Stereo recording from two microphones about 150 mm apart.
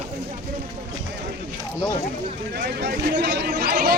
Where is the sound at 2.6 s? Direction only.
90° right.